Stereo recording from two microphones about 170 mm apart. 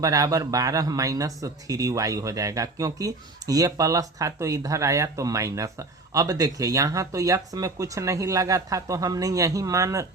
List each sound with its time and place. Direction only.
0.0 s speech: 20° right (ahead or behind)